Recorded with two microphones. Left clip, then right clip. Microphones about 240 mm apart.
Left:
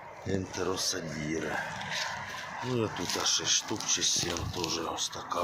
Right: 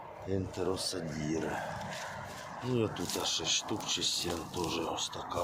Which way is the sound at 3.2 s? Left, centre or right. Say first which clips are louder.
Left 4 dB; left.